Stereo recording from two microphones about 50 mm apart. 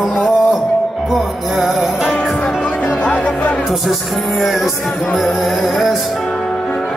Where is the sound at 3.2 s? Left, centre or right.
Left.